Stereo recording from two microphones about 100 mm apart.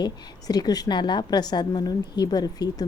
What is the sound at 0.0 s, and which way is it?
A woman's voice, 40° left (ahead or behind).